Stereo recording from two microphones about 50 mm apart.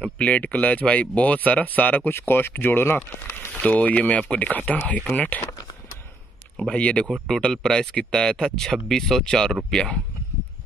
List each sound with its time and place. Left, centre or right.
0.2 s speech: left
2.1 s speech: left
3.5 s speech: left
6.7 s speech: left
7.2 s speech: centre